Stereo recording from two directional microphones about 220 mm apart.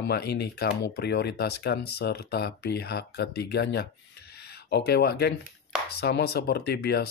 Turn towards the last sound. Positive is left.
turn(degrees=45)  # may be behind; listen again after turning